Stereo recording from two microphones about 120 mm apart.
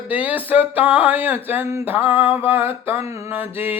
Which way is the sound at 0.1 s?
15° right (ahead or behind).